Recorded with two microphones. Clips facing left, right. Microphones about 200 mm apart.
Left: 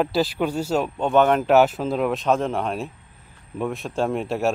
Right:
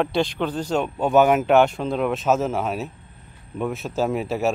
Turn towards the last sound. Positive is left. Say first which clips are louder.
# even
turn(degrees=0)  # may be behind; listen again after turning